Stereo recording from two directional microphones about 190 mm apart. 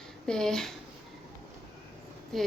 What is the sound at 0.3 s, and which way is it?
Speech, 5° left (ahead or behind).